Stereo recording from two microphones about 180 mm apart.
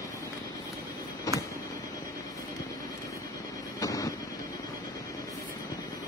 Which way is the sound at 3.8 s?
20° left (ahead or behind).